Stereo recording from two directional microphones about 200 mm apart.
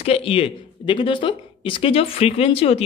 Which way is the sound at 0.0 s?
30° left (ahead or behind).